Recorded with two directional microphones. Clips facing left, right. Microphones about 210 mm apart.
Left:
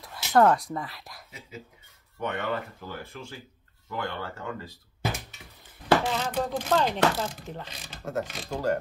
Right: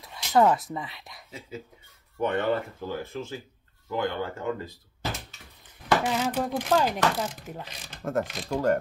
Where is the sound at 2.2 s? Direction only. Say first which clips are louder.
Right 5 dB; 30° right (ahead or behind).